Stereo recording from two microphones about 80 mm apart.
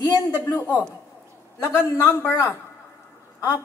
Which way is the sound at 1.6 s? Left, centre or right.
Left.